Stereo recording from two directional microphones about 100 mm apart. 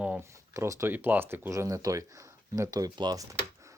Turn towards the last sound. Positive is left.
turn(degrees=-45)  # may be behind; listen again after turning